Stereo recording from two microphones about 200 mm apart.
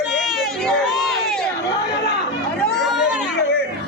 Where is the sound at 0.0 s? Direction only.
Centre (ahead or behind).